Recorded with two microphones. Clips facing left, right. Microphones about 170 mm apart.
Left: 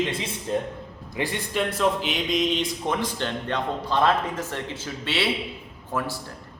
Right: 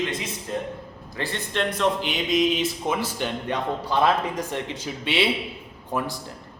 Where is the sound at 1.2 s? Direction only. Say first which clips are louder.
Left 1 dB; 10° left (ahead or behind).